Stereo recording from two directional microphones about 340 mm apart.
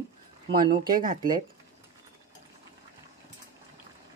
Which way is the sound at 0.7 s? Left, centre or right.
Right.